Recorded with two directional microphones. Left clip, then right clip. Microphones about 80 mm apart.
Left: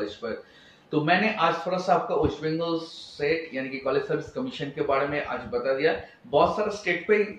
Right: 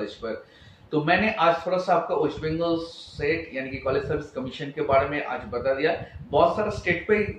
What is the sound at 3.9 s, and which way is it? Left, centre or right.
Speech, right.